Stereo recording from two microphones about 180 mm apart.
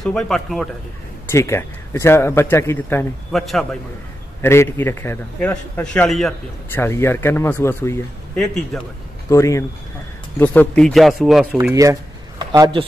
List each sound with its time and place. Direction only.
0.0 s speech: 5° left (ahead or behind)
1.3 s a man's voice: 15° left (ahead or behind)
3.3 s speech: centre (ahead or behind)
4.4 s a man's voice: 15° left (ahead or behind)
6.7 s a man's voice: 15° left (ahead or behind)
8.7 s speech: centre (ahead or behind)
9.3 s a man's voice: 15° left (ahead or behind); by 11.4 s centre (ahead or behind)
11.7 s a sound: 20° right (ahead or behind)